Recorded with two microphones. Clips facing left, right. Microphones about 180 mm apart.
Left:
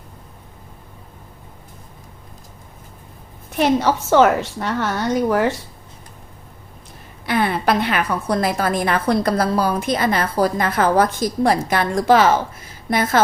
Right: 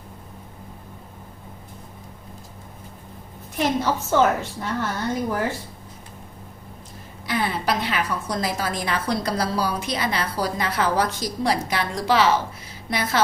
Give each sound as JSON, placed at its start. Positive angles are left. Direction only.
{"t": 3.6, "sound": "a woman's voice", "side_deg": 80}
{"t": 7.3, "sound": "a woman's voice", "side_deg": 60}